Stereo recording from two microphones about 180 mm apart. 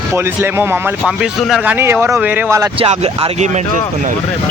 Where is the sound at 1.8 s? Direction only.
15° right (ahead or behind).